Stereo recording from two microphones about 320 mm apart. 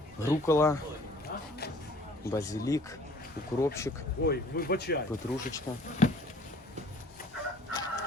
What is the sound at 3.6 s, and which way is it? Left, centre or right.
Speech, centre.